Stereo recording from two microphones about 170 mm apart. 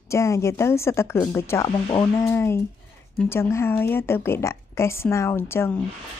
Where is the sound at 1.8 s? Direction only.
30° left (ahead or behind).